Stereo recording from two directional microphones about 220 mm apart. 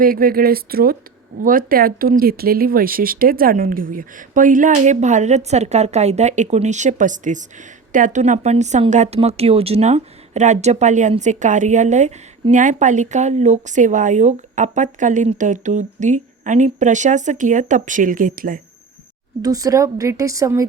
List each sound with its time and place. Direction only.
0.0 s a woman's voice: 40° right (ahead or behind)
19.4 s a woman's voice: 15° right (ahead or behind)